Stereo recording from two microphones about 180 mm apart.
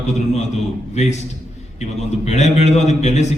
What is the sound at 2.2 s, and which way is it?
A man's voice, 40° left (ahead or behind).